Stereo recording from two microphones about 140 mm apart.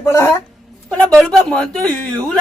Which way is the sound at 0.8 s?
5° left (ahead or behind).